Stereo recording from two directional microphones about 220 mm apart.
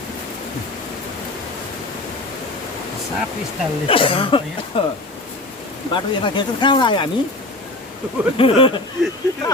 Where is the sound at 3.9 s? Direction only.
25° left (ahead or behind).